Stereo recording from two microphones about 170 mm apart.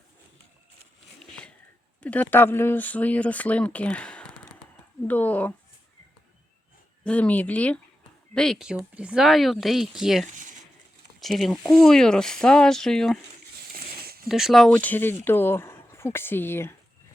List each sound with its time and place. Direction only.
2.0 s speech: 10° left (ahead or behind)
7.0 s speech: 10° left (ahead or behind)
10.2 s a sound: 50° right (ahead or behind)
11.2 s speech: centre (ahead or behind)
13.7 s a sound: 65° right (ahead or behind)
14.3 s speech: centre (ahead or behind)
14.7 s speech: 10° left (ahead or behind)